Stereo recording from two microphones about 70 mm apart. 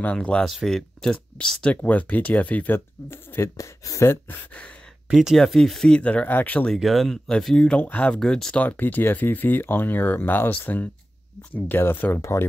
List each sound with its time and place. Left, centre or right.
0.0 s speech: centre
0.5 s speech: centre
1.1 s speech: centre; by 3.4 s left
3.5 s speech: left
5.1 s speech: centre
5.9 s speech: centre
6.7 s speech: centre
8.5 s speech: left